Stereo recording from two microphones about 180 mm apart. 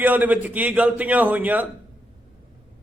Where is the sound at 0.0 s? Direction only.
10° right (ahead or behind).